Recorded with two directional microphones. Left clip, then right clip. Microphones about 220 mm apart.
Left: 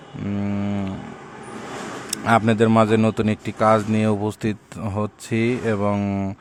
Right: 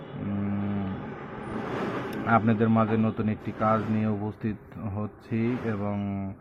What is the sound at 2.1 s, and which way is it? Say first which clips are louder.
Speech: left 7 dB; 35° left (ahead or behind).